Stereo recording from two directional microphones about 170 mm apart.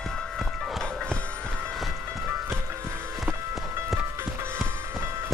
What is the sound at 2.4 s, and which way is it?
Music, 15° right (ahead or behind).